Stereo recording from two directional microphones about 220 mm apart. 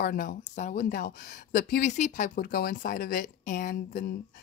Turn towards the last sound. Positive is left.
turn(degrees=40)  # may be behind; listen again after turning